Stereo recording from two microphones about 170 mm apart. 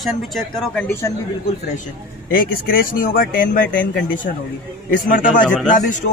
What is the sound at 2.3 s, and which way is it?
A man's voice, 60° left (ahead or behind).